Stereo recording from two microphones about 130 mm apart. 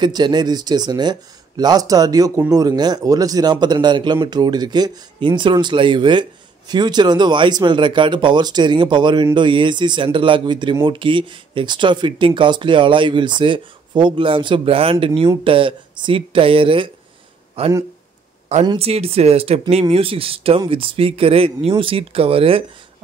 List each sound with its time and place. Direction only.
0.0 s speech: 35° right (ahead or behind); by 17.7 s 50° right (ahead or behind)
18.8 s speech: 50° right (ahead or behind)